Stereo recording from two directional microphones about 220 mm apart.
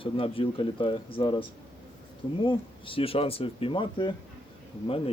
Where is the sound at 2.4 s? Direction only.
25° left (ahead or behind).